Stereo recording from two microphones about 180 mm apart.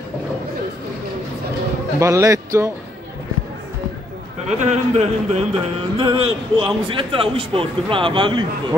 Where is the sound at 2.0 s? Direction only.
15° right (ahead or behind).